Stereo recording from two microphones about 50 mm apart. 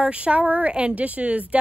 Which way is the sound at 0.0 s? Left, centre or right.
Right.